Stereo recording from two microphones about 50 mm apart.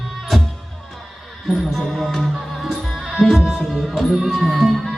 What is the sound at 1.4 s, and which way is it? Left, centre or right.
Music, centre.